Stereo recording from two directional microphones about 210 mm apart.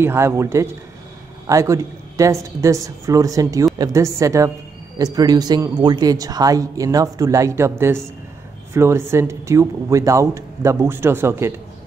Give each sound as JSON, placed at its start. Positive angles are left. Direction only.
{"t": 0.0, "sound": "speech", "side_deg": -10}